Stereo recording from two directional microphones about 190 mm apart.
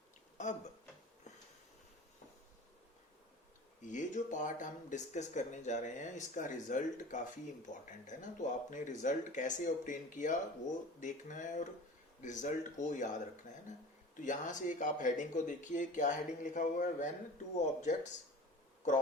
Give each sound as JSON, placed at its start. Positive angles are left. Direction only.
{"t": 0.3, "sound": "speech", "side_deg": 40}
{"t": 3.8, "sound": "speech", "side_deg": 40}